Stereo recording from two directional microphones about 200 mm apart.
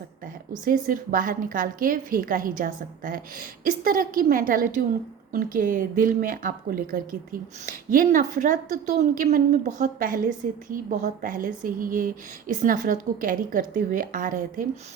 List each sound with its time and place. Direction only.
0.6 s a woman's voice: 45° right (ahead or behind)